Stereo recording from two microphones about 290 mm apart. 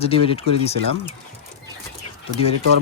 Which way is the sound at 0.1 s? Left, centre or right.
Centre.